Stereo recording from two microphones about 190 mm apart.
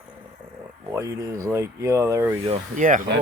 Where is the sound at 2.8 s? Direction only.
45° right (ahead or behind).